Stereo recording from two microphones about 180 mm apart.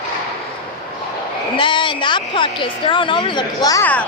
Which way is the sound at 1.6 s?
25° left (ahead or behind).